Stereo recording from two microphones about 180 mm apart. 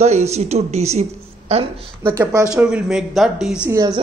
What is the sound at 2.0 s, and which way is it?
Speech, 15° right (ahead or behind).